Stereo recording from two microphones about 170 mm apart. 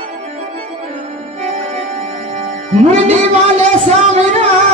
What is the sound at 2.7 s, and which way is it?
Music, 40° right (ahead or behind).